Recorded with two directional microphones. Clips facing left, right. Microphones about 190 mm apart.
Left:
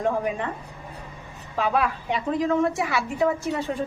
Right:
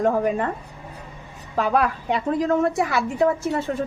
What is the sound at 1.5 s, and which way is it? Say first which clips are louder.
A woman's voice: right 3 dB; 45° right (ahead or behind).